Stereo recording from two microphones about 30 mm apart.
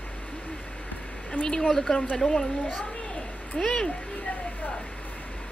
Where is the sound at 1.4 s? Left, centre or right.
Left.